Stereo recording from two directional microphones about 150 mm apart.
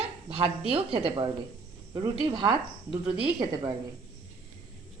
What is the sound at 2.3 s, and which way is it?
Speech, 35° right (ahead or behind).